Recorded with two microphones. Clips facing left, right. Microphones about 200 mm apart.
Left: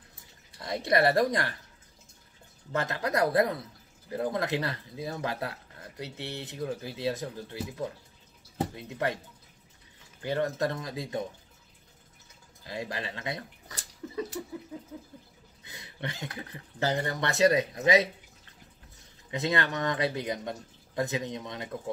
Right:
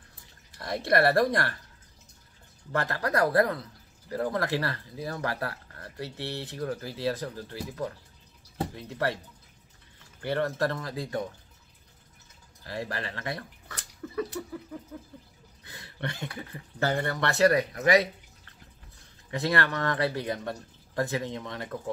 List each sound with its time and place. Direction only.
0.6 s speech: 20° left (ahead or behind)
2.7 s speech: 20° left (ahead or behind)
10.2 s speech: 15° left (ahead or behind)
12.6 s speech: 15° left (ahead or behind)
14.0 s a sound: 20° left (ahead or behind)
15.6 s a sound: 20° left (ahead or behind)
16.8 s speech: 20° left (ahead or behind)
19.3 s speech: 20° left (ahead or behind)